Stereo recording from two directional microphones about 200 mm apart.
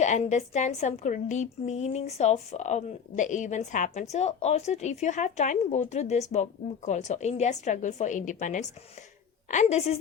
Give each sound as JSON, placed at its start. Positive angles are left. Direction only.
{"t": 0.0, "sound": "a woman's voice", "side_deg": 35}